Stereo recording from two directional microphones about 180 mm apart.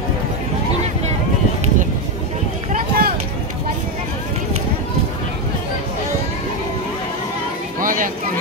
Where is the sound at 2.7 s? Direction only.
50° right (ahead or behind).